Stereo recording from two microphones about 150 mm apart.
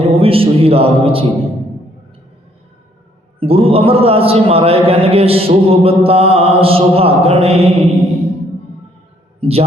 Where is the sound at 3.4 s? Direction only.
40° right (ahead or behind).